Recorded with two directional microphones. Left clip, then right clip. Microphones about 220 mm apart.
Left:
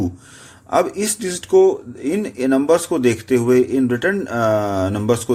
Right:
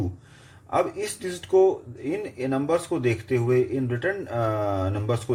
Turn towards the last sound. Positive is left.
turn(degrees=35)  # may be behind; listen again after turning